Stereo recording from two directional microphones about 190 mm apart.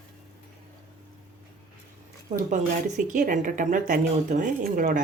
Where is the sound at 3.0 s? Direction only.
45° right (ahead or behind).